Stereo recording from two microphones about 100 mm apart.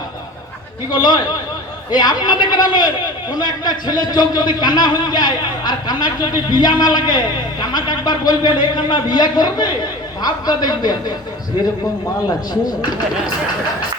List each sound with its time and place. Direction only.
0.9 s speech: 45° left (ahead or behind)